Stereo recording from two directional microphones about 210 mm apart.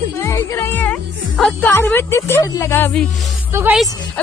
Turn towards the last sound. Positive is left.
turn(degrees=-5)  # may be behind; listen again after turning